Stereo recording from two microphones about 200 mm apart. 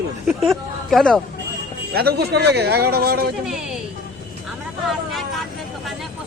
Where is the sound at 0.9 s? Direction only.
Centre (ahead or behind).